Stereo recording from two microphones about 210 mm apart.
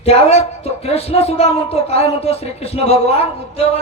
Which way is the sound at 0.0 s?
30° left (ahead or behind).